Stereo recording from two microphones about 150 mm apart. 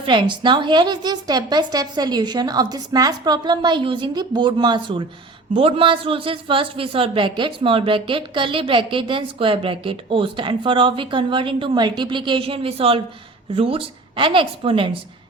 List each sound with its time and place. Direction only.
0.0 s a woman's voice: 30° right (ahead or behind)